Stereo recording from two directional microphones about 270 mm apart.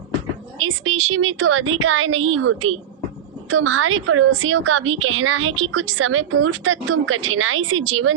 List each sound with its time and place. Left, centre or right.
0.6 s a woman's voice: right